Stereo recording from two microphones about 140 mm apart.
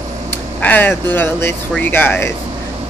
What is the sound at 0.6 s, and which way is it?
Speech, 10° left (ahead or behind).